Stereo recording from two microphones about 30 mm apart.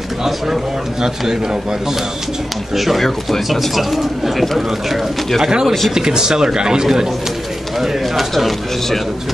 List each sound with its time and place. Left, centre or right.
1.0 s speech: right
2.7 s speech: centre
5.4 s speech: right
8.1 s speech: centre